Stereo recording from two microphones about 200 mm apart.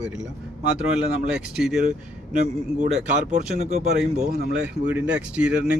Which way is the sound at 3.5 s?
35° right (ahead or behind).